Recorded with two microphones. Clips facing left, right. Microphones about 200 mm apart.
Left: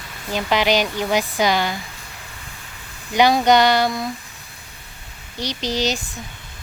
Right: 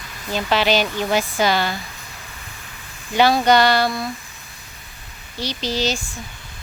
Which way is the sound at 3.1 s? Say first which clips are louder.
Even; 15° left (ahead or behind).